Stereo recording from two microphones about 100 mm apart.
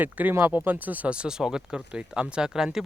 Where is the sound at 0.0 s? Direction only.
20° right (ahead or behind).